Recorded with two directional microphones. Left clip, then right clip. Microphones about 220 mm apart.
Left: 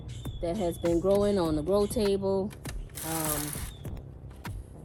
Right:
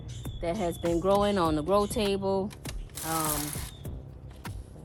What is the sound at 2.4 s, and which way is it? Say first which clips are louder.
Speech: even; 5° right (ahead or behind).